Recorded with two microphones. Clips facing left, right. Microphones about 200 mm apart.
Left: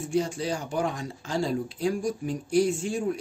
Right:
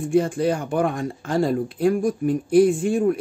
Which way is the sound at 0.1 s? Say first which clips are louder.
Right 7 dB; 55° right (ahead or behind).